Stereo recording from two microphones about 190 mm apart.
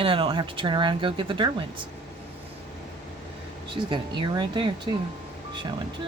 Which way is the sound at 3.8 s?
25° right (ahead or behind).